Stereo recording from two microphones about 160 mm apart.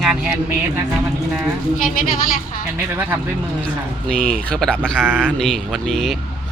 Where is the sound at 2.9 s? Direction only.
10° right (ahead or behind).